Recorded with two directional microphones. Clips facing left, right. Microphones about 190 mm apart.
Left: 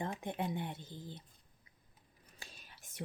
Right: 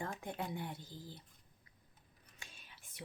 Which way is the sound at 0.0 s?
20° left (ahead or behind).